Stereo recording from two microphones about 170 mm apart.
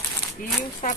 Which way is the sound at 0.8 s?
45° left (ahead or behind).